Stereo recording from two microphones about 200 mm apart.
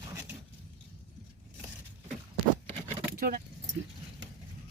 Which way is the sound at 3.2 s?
45° right (ahead or behind).